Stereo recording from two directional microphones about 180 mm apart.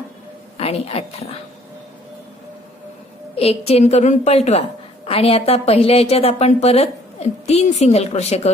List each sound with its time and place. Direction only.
0.6 s a woman's voice: 35° left (ahead or behind)
3.3 s a woman's voice: 35° left (ahead or behind)